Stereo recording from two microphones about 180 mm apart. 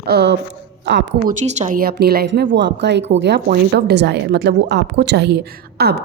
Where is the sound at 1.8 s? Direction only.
60° right (ahead or behind).